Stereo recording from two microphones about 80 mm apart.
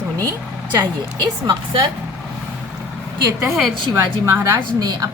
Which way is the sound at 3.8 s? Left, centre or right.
Right.